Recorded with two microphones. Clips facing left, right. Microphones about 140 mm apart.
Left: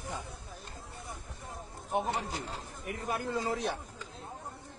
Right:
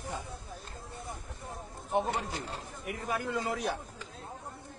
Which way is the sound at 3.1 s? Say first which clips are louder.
Even; 25° left (ahead or behind).